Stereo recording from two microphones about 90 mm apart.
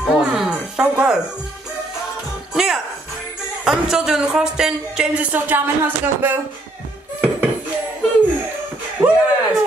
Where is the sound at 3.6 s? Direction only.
5° right (ahead or behind).